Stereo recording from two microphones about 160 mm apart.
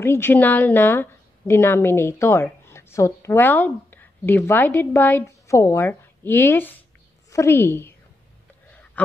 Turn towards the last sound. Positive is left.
turn(degrees=15)  # may be behind; listen again after turning